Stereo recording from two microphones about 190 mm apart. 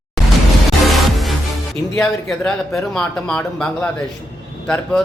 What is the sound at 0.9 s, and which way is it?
Music, centre (ahead or behind).